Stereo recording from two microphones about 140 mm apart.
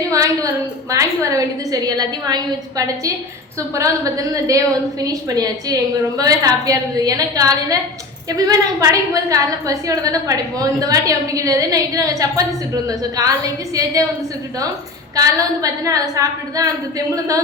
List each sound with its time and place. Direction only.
0.1 s a woman's voice: 25° right (ahead or behind)
15.1 s a woman's voice: 25° right (ahead or behind)